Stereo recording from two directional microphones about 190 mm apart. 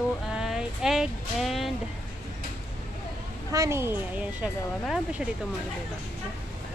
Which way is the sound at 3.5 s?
15° right (ahead or behind).